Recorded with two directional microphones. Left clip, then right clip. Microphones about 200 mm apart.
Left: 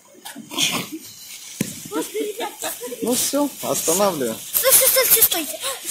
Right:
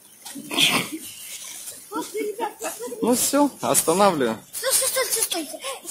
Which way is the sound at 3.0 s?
20° right (ahead or behind).